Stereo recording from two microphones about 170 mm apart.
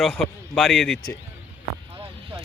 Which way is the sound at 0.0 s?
5° left (ahead or behind).